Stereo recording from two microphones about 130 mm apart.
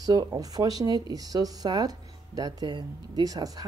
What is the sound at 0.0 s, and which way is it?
Speech, 30° right (ahead or behind).